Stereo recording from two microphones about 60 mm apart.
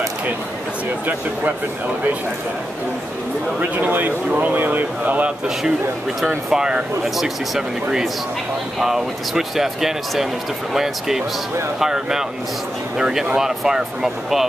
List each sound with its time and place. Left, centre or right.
3.7 s speech: right
6.5 s speech: centre